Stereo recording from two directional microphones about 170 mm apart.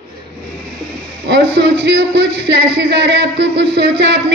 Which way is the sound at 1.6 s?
80° right.